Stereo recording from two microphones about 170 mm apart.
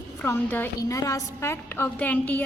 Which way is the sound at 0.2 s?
10° left (ahead or behind).